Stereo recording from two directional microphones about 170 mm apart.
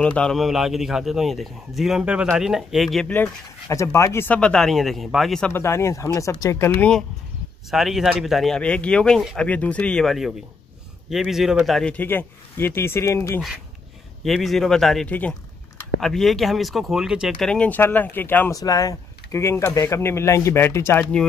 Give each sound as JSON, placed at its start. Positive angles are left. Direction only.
{"t": 0.0, "sound": "a man's voice", "side_deg": 5}
{"t": 5.5, "sound": "a man's voice", "side_deg": 15}
{"t": 14.2, "sound": "a man's voice", "side_deg": 0}